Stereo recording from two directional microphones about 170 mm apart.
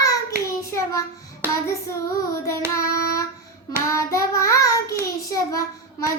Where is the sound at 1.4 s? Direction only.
15° right (ahead or behind).